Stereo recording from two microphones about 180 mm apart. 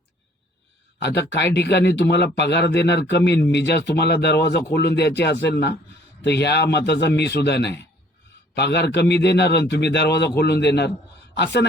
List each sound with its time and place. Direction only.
1.0 s speech: 70° left (ahead or behind)